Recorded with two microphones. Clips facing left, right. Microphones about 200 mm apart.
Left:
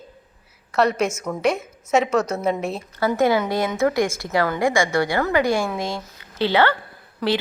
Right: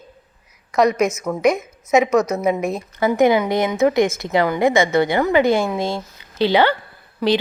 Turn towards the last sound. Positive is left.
turn(degrees=-10)  # may be behind; listen again after turning